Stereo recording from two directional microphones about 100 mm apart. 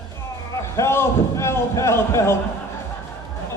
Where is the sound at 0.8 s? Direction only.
25° left (ahead or behind).